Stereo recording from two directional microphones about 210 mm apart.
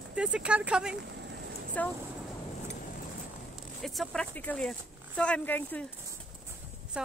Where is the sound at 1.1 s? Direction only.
55° right (ahead or behind).